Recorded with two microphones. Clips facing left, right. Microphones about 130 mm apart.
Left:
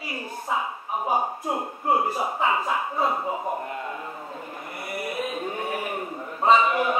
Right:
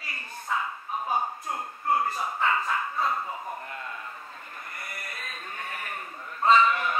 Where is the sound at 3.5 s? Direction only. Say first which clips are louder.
Left 7 dB; 20° left (ahead or behind).